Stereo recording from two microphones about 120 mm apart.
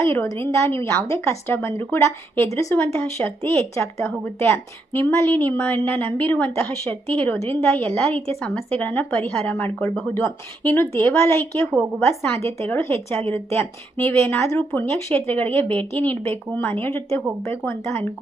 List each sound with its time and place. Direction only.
0.0 s a woman's voice: 20° left (ahead or behind)